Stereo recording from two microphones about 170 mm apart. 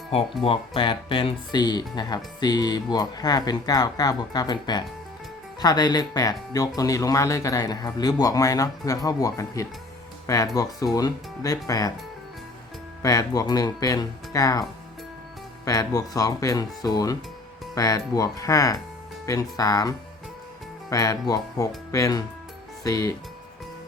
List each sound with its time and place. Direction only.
0.4 s speech: 30° left (ahead or behind)
13.0 s speech: 20° left (ahead or behind)
15.6 s speech: 20° left (ahead or behind)
20.9 s speech: 20° left (ahead or behind)